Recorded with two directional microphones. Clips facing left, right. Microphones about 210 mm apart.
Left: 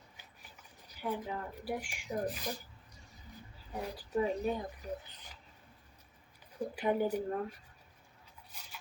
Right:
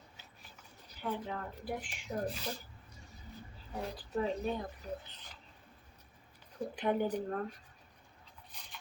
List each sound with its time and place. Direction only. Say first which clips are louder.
0.2 s speech: even; 10° left (ahead or behind)
3.8 s speech: left 2 dB; 10° left (ahead or behind)
6.6 s speech: left 1 dB; 5° left (ahead or behind)
8.5 s filing: left 1 dB; 5° left (ahead or behind)